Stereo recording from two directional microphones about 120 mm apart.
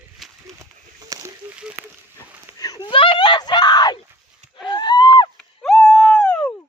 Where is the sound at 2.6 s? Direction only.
30° left (ahead or behind).